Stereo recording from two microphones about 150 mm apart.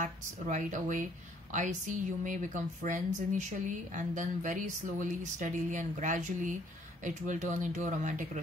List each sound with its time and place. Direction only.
0.0 s speech: 55° right (ahead or behind)